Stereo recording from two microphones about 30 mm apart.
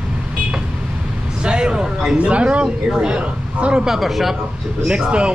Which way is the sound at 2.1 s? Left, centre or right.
Right.